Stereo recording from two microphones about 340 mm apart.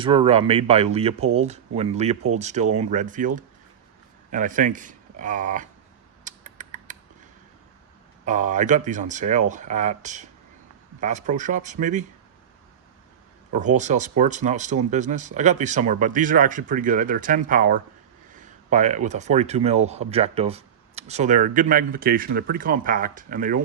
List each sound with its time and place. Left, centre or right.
0.0 s speech: centre
6.2 s a sound: right
8.2 s speech: right
13.5 s speech: right